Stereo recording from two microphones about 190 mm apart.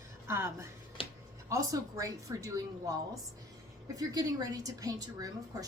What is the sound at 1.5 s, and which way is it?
A woman's voice, 15° right (ahead or behind).